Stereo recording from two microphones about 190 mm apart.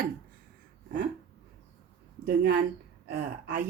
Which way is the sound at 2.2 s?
55° right (ahead or behind).